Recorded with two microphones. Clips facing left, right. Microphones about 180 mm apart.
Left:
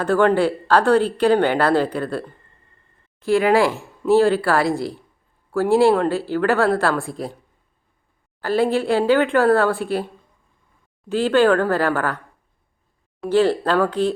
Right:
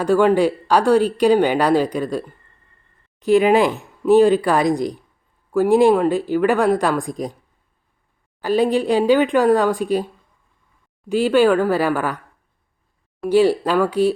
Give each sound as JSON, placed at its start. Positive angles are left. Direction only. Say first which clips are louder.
{"t": 0.0, "sound": "a woman's voice", "louder": "right 2 dB", "side_deg": -15}
{"t": 8.4, "sound": "a woman's voice", "louder": "right 2 dB", "side_deg": -15}
{"t": 11.1, "sound": "a woman's voice", "louder": "right 1 dB", "side_deg": -10}
{"t": 13.2, "sound": "a woman's voice", "louder": "right 2 dB", "side_deg": -15}